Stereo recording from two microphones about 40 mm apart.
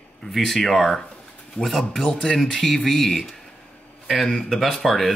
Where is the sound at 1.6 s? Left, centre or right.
Left.